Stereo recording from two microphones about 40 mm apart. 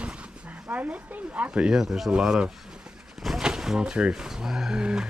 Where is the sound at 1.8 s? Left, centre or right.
Centre.